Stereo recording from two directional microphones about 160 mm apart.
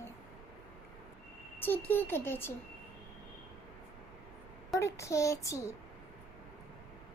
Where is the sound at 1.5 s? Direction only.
15° left (ahead or behind).